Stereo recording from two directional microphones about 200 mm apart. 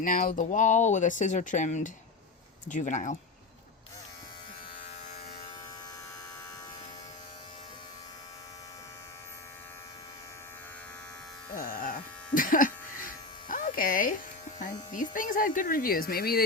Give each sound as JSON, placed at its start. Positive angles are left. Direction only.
{"t": 0.0, "sound": "speech", "side_deg": 40}
{"t": 11.5, "sound": "electric shaver", "side_deg": 45}
{"t": 14.6, "sound": "speech", "side_deg": 40}